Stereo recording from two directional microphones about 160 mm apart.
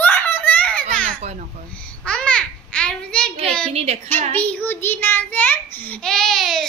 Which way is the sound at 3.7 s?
40° right (ahead or behind).